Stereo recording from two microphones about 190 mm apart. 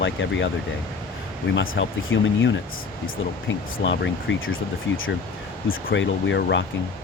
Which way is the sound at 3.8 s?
75° left (ahead or behind).